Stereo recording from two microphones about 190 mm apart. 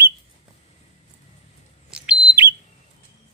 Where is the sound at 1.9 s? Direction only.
5° right (ahead or behind).